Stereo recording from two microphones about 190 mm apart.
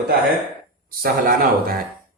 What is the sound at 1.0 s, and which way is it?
Speech, 50° right (ahead or behind).